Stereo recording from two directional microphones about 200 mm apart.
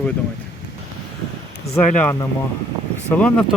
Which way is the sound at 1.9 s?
5° left (ahead or behind).